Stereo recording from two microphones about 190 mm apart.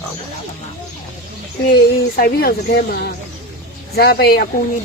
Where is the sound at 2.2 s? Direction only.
55° left (ahead or behind).